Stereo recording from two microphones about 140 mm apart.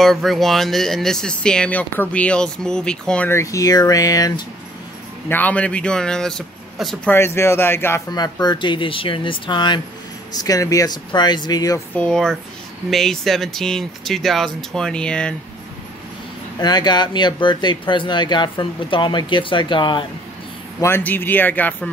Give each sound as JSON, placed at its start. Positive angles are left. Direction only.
{"t": 0.0, "sound": "speech", "side_deg": 0}
{"t": 3.3, "sound": "speech", "side_deg": 20}
{"t": 5.3, "sound": "speech", "side_deg": 10}
{"t": 7.1, "sound": "speech", "side_deg": 20}
{"t": 8.1, "sound": "speech", "side_deg": 30}
{"t": 11.9, "sound": "speech", "side_deg": 5}
{"t": 16.5, "sound": "speech", "side_deg": 30}
{"t": 20.8, "sound": "speech", "side_deg": 15}